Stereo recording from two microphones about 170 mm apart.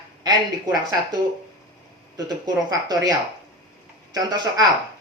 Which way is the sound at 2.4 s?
20° right (ahead or behind).